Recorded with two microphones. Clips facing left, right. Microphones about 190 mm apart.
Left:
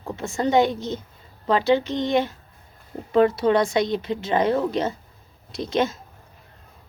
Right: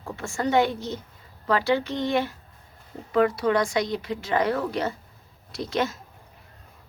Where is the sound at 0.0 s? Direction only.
20° left (ahead or behind).